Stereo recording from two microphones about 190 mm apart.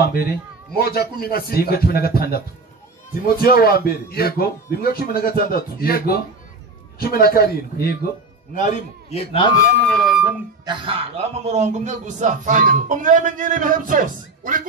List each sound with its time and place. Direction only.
0.0 s a man's voice: 55° left (ahead or behind)
3.4 s a man's voice: 55° left (ahead or behind)
8.5 s a man's voice: 35° left (ahead or behind)
9.8 s speech: 5° left (ahead or behind)
10.6 s a man's voice: 25° right (ahead or behind); by 14.6 s 45° right (ahead or behind)